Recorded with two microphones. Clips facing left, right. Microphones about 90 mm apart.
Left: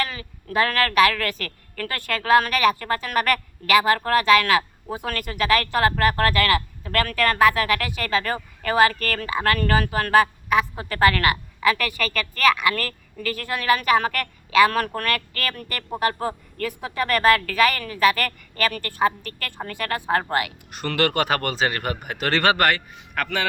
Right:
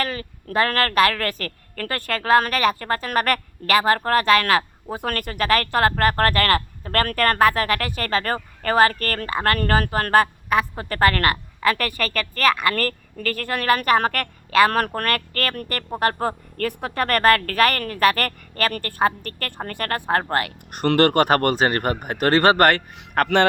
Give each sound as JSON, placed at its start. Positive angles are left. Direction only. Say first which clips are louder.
{"t": 0.0, "sound": "a woman's voice", "louder": "right 2 dB", "side_deg": -40}